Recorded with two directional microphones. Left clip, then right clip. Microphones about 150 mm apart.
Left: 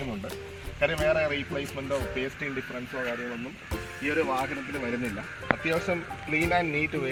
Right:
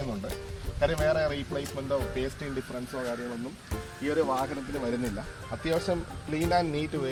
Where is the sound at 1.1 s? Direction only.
15° right (ahead or behind).